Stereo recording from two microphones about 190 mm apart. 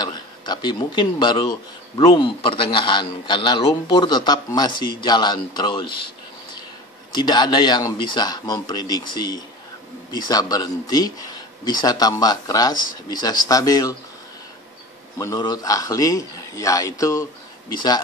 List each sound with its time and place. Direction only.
0.0 s a man's voice: 20° left (ahead or behind)
7.1 s a man's voice: 20° left (ahead or behind)
15.1 s a man's voice: 20° left (ahead or behind)